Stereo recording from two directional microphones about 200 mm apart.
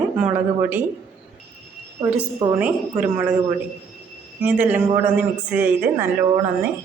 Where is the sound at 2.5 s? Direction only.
5° right (ahead or behind).